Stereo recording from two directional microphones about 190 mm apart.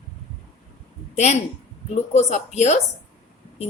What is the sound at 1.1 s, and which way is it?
A woman's voice, 35° left (ahead or behind).